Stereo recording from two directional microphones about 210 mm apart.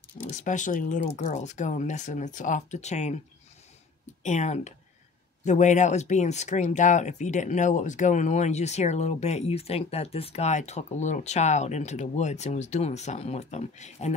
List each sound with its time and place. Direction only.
0.2 s speech: 35° left (ahead or behind)
4.2 s speech: 35° left (ahead or behind)